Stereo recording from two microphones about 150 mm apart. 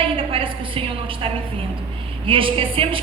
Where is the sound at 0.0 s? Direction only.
35° right (ahead or behind).